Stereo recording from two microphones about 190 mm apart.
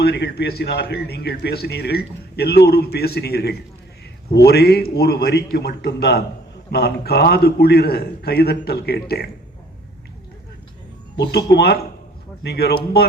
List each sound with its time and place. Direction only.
0.0 s a man's voice: 60° left (ahead or behind)
11.2 s a man's voice: 60° left (ahead or behind)